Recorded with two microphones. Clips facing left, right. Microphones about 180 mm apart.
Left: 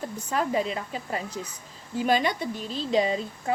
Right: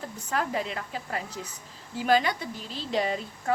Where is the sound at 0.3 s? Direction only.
20° left (ahead or behind).